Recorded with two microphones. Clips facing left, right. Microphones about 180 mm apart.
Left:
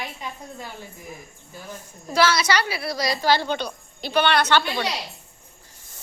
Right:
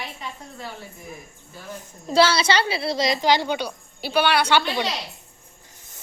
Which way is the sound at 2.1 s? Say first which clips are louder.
Right 2 dB; 30° right (ahead or behind).